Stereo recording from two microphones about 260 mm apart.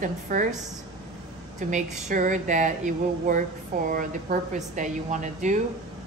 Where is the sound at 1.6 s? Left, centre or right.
Right.